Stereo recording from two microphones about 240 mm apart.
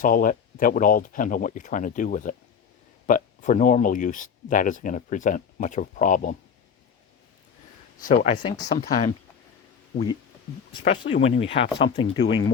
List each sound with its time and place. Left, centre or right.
0.0 s speech: left
8.0 s speech: left
8.4 s speech: centre
8.7 s speech: left
10.8 s speech: left